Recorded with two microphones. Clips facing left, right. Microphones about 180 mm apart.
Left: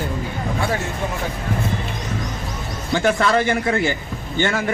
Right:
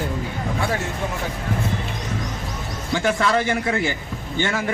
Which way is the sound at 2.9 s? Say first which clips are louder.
Left 3 dB; 65° left (ahead or behind).